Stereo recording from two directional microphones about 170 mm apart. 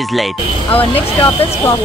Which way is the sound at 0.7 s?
30° left (ahead or behind).